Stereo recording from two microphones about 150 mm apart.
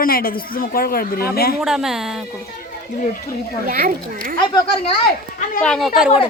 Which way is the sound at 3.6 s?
70° right (ahead or behind).